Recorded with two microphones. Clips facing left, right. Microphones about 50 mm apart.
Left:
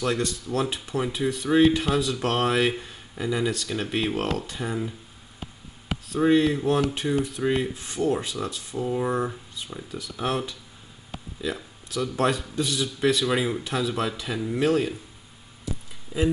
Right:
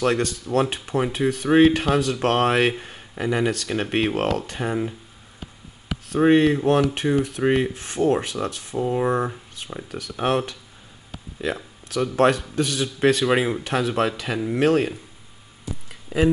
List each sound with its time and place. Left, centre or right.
0.0 s speech: right
6.1 s speech: right
8.7 s speech: right
9.8 s speech: right
10.1 s speech: right
16.1 s speech: right